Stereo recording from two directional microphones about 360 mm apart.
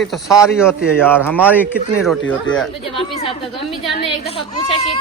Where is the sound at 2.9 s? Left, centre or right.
Centre.